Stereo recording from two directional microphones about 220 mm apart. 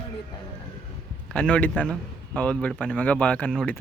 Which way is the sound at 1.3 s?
5° left (ahead or behind).